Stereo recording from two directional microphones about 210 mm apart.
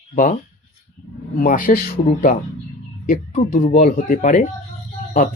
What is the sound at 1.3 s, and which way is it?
Speech, 40° left (ahead or behind).